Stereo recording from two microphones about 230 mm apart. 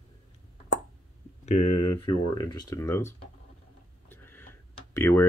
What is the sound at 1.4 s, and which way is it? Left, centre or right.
Speech, left.